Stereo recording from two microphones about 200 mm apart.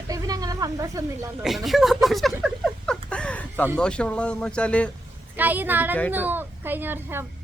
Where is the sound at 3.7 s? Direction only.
5° left (ahead or behind).